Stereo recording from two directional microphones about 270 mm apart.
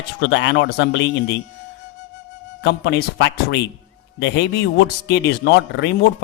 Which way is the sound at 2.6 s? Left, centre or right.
Left.